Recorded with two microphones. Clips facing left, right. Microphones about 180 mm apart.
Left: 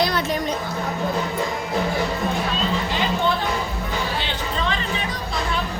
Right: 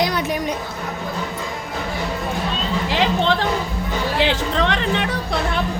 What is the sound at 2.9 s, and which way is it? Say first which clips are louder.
Music: right 7 dB; 90° right.